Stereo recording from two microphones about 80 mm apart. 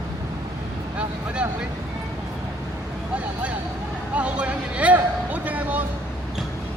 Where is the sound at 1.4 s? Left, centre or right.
Centre.